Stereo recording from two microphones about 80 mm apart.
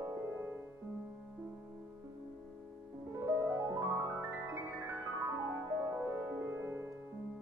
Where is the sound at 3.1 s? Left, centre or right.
Right.